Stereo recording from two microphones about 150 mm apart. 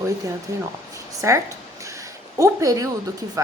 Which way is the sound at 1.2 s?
20° right (ahead or behind).